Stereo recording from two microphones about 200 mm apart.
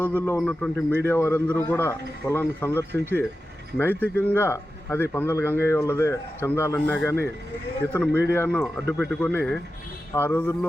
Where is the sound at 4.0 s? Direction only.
10° left (ahead or behind).